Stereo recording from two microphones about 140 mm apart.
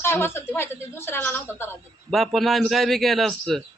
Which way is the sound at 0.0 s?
15° left (ahead or behind).